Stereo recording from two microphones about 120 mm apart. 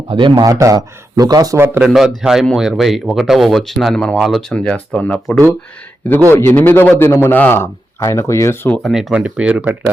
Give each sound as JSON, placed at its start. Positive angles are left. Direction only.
{"t": 0.1, "sound": "speech", "side_deg": -45}
{"t": 0.6, "sound": "speech", "side_deg": -30}
{"t": 1.5, "sound": "speech", "side_deg": -20}
{"t": 1.8, "sound": "a man's voice", "side_deg": -5}
{"t": 8.7, "sound": "speech", "side_deg": 0}